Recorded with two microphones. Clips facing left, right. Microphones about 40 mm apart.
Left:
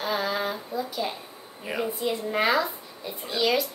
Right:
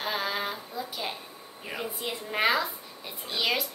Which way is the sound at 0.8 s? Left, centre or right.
Right.